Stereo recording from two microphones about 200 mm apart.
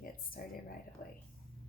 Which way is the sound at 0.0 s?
45° left (ahead or behind).